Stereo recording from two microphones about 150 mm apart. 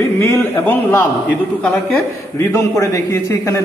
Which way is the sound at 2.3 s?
20° left (ahead or behind).